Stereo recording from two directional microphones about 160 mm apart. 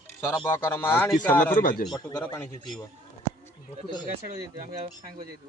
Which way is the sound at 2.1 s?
10° left (ahead or behind).